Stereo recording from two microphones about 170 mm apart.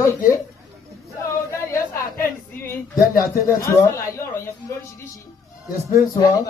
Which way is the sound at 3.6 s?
15° left (ahead or behind).